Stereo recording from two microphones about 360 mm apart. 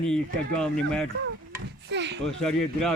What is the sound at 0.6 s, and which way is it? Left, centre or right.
Speech, centre.